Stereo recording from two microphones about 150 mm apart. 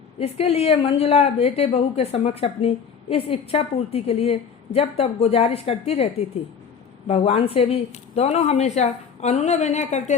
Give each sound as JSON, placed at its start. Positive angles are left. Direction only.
{"t": 0.2, "sound": "a woman's voice", "side_deg": 40}
{"t": 7.1, "sound": "a woman's voice", "side_deg": 45}